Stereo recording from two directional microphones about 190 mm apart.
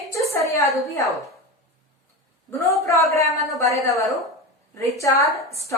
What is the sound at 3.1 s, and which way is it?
A woman's voice, 15° left (ahead or behind).